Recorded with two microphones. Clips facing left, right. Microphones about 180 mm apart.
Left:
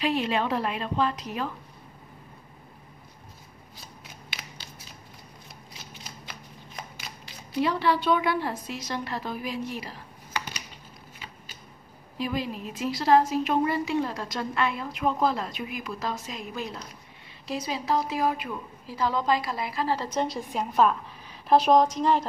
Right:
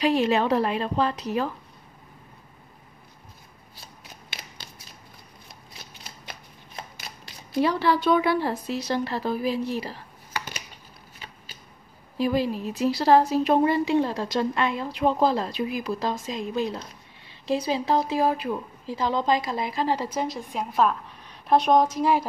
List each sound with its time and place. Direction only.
0.0 s a woman's voice: 40° right (ahead or behind)
7.5 s a woman's voice: 40° right (ahead or behind)
12.2 s a woman's voice: 35° right (ahead or behind)
18.9 s a woman's voice: 20° right (ahead or behind)
20.1 s a woman's voice: centre (ahead or behind)